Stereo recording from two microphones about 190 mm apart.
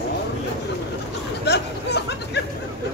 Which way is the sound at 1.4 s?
65° left (ahead or behind).